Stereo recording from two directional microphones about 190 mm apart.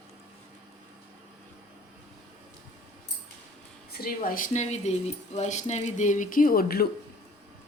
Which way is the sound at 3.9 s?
50° left (ahead or behind).